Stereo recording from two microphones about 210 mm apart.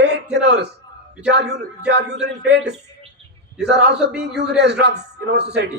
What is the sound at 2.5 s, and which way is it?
A man's voice, 55° right (ahead or behind).